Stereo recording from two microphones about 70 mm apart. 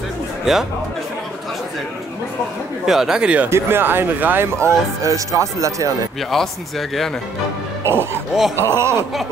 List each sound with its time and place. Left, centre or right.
0.5 s speech: centre
2.9 s speech: centre
3.4 s speech: right
6.3 s speech: centre
7.8 s speech: right